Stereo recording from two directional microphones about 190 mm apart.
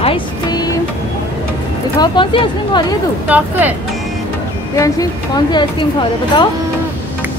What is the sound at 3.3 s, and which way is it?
Speech, 10° right (ahead or behind).